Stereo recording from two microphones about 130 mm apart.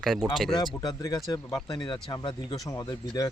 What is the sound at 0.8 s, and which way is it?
Speech, 30° left (ahead or behind).